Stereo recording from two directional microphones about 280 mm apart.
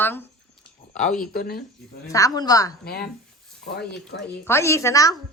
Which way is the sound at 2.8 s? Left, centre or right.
Left.